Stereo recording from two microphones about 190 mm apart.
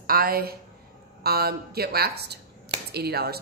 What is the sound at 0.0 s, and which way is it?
A woman's voice, 50° right (ahead or behind).